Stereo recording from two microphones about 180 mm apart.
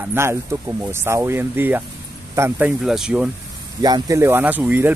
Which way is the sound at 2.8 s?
Centre (ahead or behind).